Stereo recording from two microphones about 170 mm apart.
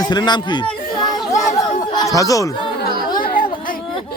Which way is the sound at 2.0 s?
20° left (ahead or behind).